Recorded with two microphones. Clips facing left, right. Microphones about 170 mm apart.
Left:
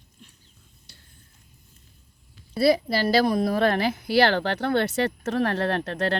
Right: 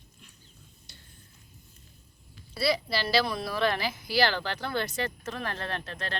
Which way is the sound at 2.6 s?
50° left (ahead or behind).